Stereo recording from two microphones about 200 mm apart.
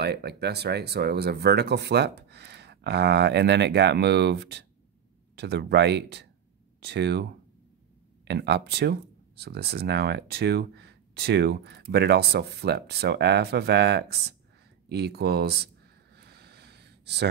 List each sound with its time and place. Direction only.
0.0 s speech: 55° right (ahead or behind)
8.3 s speech: 55° right (ahead or behind)
16.2 s a sound: 55° right (ahead or behind)